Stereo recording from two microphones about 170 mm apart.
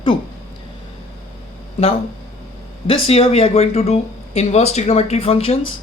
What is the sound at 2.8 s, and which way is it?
Speech, 35° left (ahead or behind).